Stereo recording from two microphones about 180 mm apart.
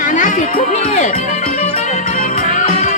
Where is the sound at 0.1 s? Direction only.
45° left (ahead or behind).